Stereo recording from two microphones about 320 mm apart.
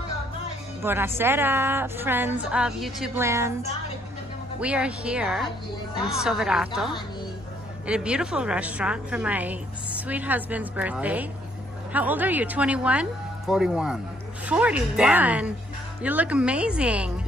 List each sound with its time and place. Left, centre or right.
0.8 s a woman's voice: centre
4.6 s a woman's voice: centre